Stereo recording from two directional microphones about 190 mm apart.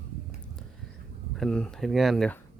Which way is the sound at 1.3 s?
5° left (ahead or behind).